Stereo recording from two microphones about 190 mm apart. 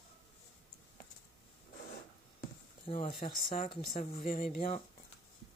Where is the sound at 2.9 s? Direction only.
30° left (ahead or behind).